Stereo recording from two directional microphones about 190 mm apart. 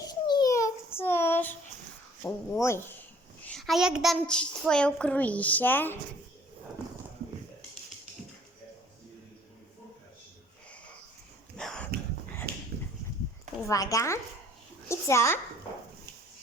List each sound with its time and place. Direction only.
0.1 s child singing: 20° left (ahead or behind)
2.2 s speech: 15° left (ahead or behind)
3.4 s a child's voice: centre (ahead or behind)
11.5 s a sound: 5° left (ahead or behind)
13.7 s a child's voice: 20° left (ahead or behind)